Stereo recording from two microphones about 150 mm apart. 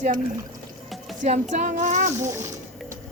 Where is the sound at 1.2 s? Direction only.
55° right (ahead or behind).